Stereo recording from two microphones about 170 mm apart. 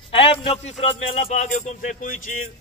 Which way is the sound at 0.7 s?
45° left (ahead or behind).